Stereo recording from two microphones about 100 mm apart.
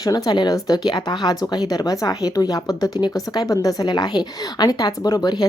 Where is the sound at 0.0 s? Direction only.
40° left (ahead or behind).